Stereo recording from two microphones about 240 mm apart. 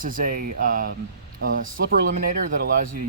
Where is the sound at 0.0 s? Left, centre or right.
Right.